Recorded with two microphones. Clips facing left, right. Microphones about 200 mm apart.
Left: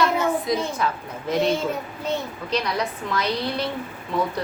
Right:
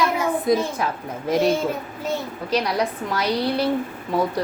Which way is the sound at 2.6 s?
40° right (ahead or behind).